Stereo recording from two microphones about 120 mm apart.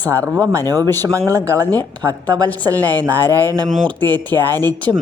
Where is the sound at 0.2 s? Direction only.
30° right (ahead or behind).